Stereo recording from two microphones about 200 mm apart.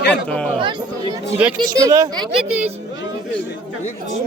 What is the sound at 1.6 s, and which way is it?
Speech, 20° right (ahead or behind).